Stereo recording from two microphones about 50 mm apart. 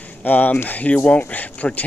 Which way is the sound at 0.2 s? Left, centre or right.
Left.